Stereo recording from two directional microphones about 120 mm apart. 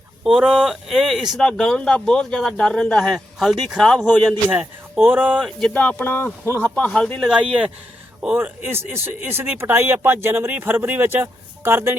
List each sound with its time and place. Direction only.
0.3 s speech: 5° right (ahead or behind)
4.4 s speech: 15° right (ahead or behind)
5.5 s speech: 5° left (ahead or behind)
6.7 s speech: 5° left (ahead or behind)
8.2 s speech: 10° right (ahead or behind)